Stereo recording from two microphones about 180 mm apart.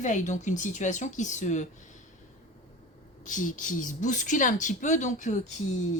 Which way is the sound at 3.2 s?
45° left (ahead or behind).